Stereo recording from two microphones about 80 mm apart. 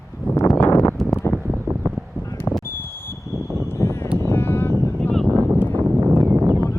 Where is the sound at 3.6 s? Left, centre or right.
Left.